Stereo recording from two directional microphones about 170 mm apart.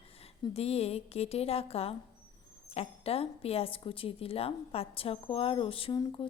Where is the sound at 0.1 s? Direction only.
35° left (ahead or behind).